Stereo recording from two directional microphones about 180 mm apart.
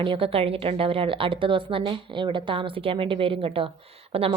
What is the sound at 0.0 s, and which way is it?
A woman's voice, 30° right (ahead or behind).